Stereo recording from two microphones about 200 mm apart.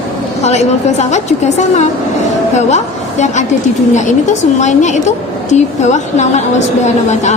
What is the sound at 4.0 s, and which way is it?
A woman's voice, 35° left (ahead or behind).